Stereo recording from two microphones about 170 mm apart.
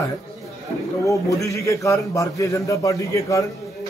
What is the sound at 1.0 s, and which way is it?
A man's voice, 20° left (ahead or behind).